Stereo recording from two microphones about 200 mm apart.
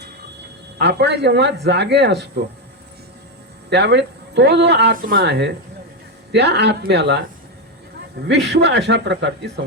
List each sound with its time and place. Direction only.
0.8 s speech: 55° right (ahead or behind)
3.7 s speech: 60° right (ahead or behind)
8.3 s speech: 55° right (ahead or behind)